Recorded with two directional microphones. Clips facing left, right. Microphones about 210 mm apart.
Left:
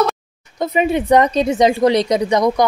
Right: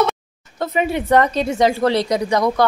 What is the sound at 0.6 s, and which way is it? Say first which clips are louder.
Speech: left 3 dB; 15° left (ahead or behind).